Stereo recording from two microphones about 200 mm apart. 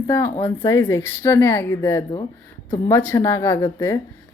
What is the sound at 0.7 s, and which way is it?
Speech, 15° left (ahead or behind).